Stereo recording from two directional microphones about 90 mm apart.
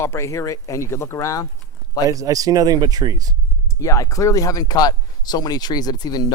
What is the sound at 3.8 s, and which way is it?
Speech, 35° left (ahead or behind).